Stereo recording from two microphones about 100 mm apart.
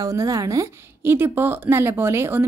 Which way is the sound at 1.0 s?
20° right (ahead or behind).